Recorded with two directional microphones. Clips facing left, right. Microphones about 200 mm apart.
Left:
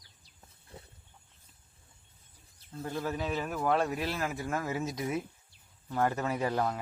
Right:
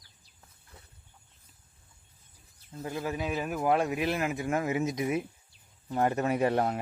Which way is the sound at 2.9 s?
10° right (ahead or behind).